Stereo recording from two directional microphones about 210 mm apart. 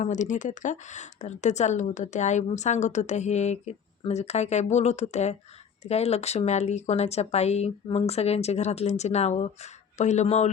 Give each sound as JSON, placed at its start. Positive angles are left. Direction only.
{"t": 0.0, "sound": "speech", "side_deg": 35}